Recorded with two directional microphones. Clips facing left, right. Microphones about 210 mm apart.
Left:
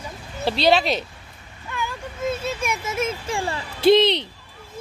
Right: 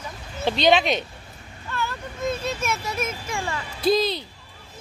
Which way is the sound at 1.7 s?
10° left (ahead or behind).